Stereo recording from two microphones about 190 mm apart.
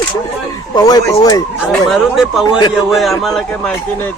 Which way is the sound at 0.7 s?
20° left (ahead or behind).